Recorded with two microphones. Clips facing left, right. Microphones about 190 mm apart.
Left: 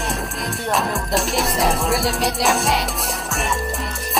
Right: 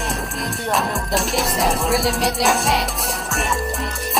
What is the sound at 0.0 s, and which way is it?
Music, centre (ahead or behind).